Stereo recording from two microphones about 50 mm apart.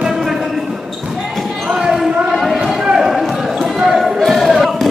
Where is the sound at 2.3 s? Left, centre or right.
Centre.